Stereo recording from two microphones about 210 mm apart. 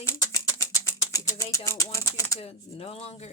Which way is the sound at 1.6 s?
15° left (ahead or behind).